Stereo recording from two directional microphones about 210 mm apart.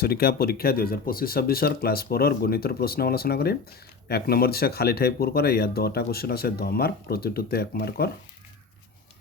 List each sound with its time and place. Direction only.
0.0 s speech: 45° left (ahead or behind)